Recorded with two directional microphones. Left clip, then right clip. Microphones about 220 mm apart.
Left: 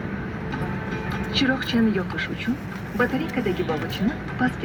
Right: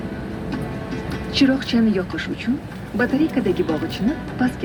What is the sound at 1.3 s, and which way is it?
Speech, 55° right (ahead or behind).